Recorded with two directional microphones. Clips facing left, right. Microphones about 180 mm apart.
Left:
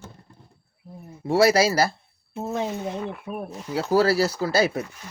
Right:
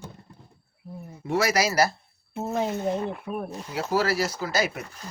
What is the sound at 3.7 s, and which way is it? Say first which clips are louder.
Speech: left 5 dB; 30° left (ahead or behind).